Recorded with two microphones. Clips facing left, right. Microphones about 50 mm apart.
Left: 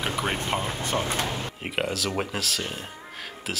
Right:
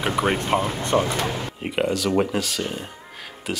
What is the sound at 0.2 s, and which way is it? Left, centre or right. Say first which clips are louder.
Speech: right 8 dB; right.